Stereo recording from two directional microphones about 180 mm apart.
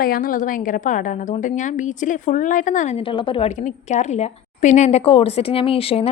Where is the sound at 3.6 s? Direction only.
40° left (ahead or behind).